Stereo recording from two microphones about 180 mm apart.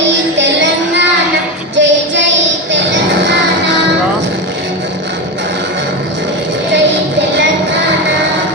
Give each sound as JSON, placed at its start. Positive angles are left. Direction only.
{"t": 0.3, "sound": "music", "side_deg": -85}
{"t": 1.7, "sound": "child singing", "side_deg": -90}
{"t": 2.7, "sound": "music", "side_deg": -80}